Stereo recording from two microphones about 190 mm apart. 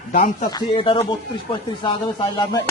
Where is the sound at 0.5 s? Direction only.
25° left (ahead or behind).